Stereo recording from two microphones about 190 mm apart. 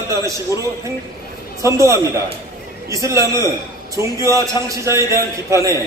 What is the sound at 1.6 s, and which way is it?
A man's voice, 15° right (ahead or behind).